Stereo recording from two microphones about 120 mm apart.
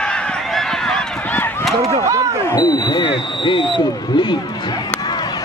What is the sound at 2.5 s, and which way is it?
Basketball bounce, 35° left (ahead or behind).